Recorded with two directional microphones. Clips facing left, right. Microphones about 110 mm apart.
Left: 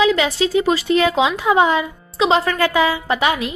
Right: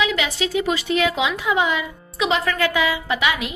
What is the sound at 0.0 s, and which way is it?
Speech, 35° left (ahead or behind).